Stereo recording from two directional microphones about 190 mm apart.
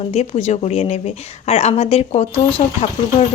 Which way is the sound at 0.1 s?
35° left (ahead or behind).